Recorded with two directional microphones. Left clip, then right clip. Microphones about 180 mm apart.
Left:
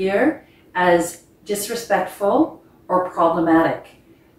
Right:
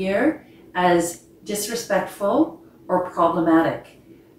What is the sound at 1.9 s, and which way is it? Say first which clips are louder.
Speech: left 3 dB; 15° right (ahead or behind).